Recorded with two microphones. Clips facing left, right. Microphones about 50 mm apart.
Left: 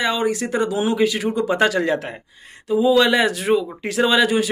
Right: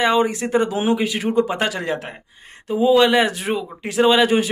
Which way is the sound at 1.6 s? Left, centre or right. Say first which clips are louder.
Left 4 dB; centre.